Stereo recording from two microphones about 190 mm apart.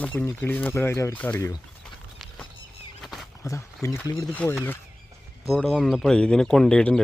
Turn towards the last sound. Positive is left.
turn(degrees=5)  # may be behind; listen again after turning